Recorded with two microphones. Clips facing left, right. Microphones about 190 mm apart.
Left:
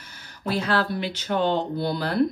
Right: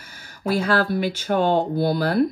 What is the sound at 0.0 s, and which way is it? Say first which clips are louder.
Speech: right 4 dB; 50° right (ahead or behind).